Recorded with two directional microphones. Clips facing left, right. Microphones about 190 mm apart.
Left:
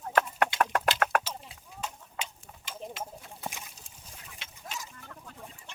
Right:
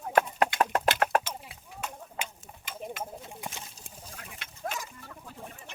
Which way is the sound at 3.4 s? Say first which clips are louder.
Left 3 dB; 15° right (ahead or behind).